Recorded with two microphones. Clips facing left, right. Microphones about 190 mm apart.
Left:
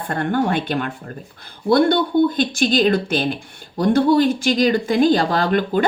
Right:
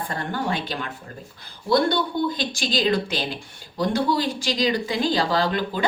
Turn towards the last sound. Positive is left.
turn(degrees=55)  # may be behind; listen again after turning